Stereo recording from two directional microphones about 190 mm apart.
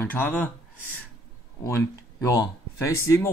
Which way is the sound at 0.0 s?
10° left (ahead or behind).